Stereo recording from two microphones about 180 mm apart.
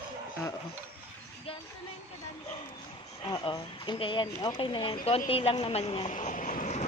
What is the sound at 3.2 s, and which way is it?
Speech, 25° left (ahead or behind).